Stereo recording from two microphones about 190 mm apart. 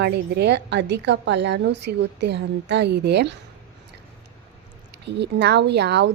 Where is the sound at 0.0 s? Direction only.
60° right (ahead or behind).